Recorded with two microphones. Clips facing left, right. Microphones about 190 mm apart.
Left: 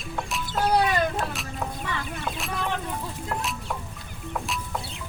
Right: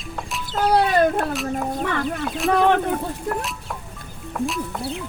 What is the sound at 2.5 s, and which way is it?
Speech, 65° right (ahead or behind).